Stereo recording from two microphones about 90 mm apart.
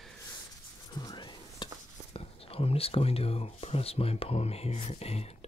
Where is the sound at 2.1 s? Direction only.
90° left.